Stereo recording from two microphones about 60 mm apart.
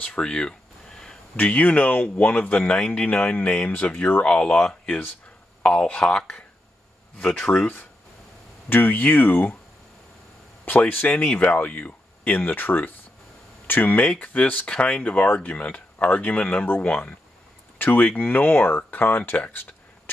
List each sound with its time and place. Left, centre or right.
0.0 s a sound: centre
1.3 s speech: left
5.6 s speech: centre
8.6 s speech: left
10.9 s speech: left; by 15.1 s centre
15.1 s speech: left